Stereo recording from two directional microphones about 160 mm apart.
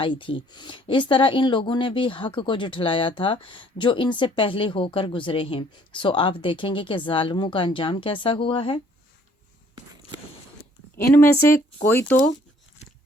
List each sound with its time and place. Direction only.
0.0 s speech: 30° left (ahead or behind)
11.1 s speech: 15° left (ahead or behind)